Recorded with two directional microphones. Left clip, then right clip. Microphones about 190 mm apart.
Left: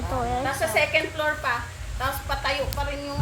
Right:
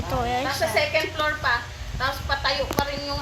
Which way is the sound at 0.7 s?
25° left (ahead or behind).